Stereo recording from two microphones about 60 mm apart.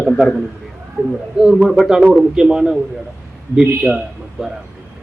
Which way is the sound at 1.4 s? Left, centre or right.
Centre.